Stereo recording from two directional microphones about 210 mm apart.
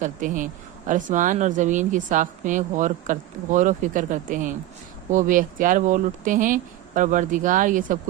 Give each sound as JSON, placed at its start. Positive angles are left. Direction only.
{"t": 0.0, "sound": "speech", "side_deg": -40}